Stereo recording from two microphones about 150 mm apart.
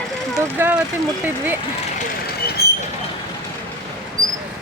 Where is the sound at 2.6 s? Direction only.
90° left.